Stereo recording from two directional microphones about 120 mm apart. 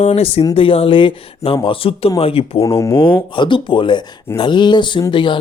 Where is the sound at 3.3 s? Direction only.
40° left (ahead or behind).